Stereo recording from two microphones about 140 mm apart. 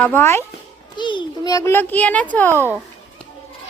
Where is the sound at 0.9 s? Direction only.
35° left (ahead or behind); by 2.6 s 10° left (ahead or behind).